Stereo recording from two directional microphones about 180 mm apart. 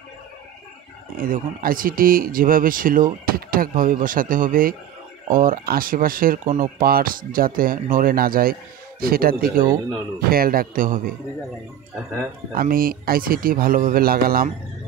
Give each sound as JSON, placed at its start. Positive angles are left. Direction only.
{"t": 1.1, "sound": "speech", "side_deg": -50}
{"t": 12.5, "sound": "speech", "side_deg": -55}